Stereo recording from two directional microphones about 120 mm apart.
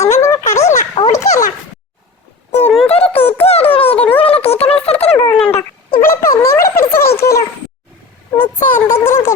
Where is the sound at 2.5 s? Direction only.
65° left (ahead or behind).